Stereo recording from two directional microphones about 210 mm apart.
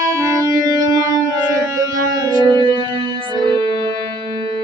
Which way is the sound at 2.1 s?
20° right (ahead or behind).